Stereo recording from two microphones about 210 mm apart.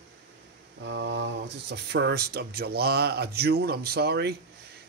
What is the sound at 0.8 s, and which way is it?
A man's voice, 60° right (ahead or behind).